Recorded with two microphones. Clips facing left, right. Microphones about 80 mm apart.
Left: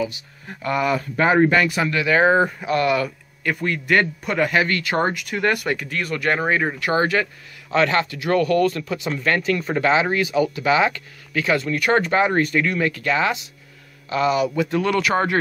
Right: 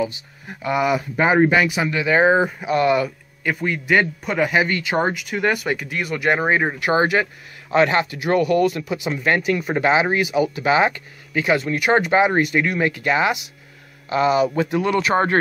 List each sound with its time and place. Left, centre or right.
0.5 s speech: centre
2.0 s speech: right
3.4 s speech: centre
4.6 s speech: centre
5.0 s speech: centre; by 14.7 s right
14.7 s speech: centre